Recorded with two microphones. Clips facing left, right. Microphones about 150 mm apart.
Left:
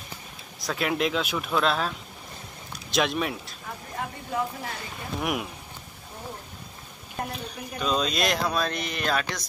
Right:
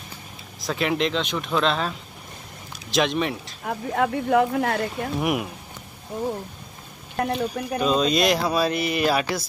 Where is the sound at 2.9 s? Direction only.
Centre (ahead or behind).